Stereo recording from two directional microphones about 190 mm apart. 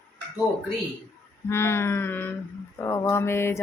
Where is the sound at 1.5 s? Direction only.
15° left (ahead or behind).